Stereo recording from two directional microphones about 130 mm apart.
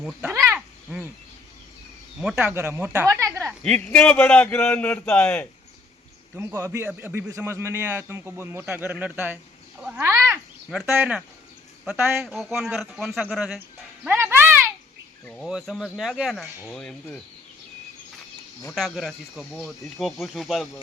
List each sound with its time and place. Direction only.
0.0 s a sound: 10° right (ahead or behind)
2.2 s a man's voice: 10° right (ahead or behind)
3.6 s a man's voice: 10° left (ahead or behind)
6.3 s a man's voice: 20° right (ahead or behind)
10.0 s a sound: 20° right (ahead or behind)
10.9 s a man's voice: 10° right (ahead or behind)
12.2 s speech: centre (ahead or behind)
14.0 s a sound: 15° right (ahead or behind)
15.2 s cricket: 5° left (ahead or behind)
15.4 s a man's voice: 5° right (ahead or behind)
18.7 s speech: centre (ahead or behind)